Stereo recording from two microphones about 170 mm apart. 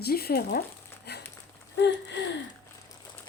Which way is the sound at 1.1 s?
75° left (ahead or behind).